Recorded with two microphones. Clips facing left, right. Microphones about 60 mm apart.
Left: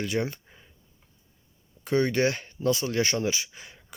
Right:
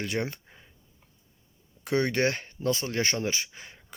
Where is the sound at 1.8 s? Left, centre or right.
Right.